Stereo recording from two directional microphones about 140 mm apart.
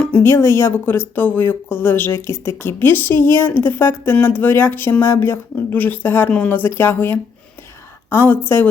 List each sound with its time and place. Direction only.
0.0 s speech: 10° left (ahead or behind)